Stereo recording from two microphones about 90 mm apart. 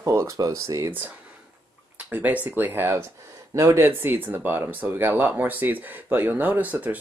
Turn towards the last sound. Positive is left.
turn(degrees=-15)  # may be behind; listen again after turning